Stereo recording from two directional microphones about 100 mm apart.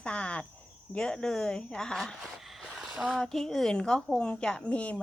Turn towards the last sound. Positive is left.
turn(degrees=15)  # may be behind; listen again after turning